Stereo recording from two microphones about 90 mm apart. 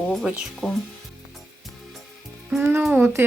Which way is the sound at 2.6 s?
20° right (ahead or behind).